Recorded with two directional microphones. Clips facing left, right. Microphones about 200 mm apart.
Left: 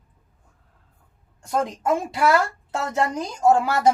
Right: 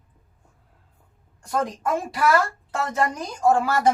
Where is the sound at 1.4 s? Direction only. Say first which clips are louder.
Left 1 dB; 25° left (ahead or behind).